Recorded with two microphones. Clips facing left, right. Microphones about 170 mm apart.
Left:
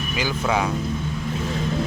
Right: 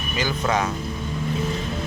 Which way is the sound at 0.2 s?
10° left (ahead or behind).